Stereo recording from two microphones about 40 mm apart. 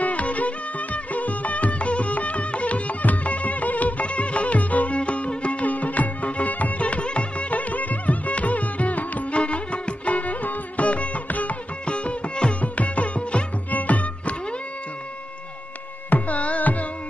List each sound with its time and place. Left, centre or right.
0.0 s music: left
11.8 s music: left
16.1 s music: left